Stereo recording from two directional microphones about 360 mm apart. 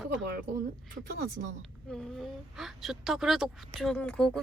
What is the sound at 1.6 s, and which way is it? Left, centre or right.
A woman's voice, centre.